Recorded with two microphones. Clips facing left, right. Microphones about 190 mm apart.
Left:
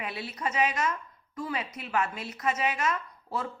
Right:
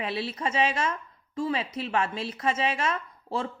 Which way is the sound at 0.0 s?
30° right (ahead or behind).